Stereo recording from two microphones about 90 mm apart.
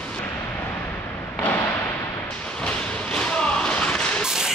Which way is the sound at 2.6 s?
10° left (ahead or behind).